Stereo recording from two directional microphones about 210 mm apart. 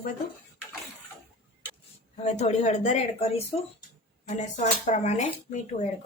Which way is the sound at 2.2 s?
35° left (ahead or behind).